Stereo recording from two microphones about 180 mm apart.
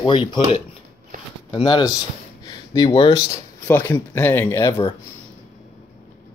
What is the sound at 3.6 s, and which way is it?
Speech, 10° left (ahead or behind).